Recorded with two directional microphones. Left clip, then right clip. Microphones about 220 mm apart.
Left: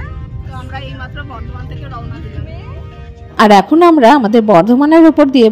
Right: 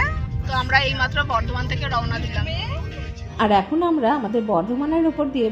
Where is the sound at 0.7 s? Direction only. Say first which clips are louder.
Right 10 dB; 15° left (ahead or behind).